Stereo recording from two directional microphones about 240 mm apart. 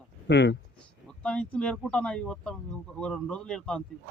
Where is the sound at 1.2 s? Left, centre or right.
Centre.